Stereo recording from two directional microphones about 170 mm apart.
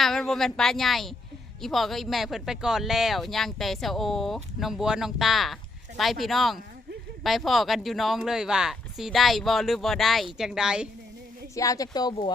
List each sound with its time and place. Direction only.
0.0 s speech: centre (ahead or behind)
11.5 s speech: 20° left (ahead or behind)